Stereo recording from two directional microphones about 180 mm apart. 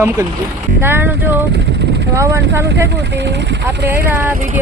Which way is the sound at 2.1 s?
15° right (ahead or behind).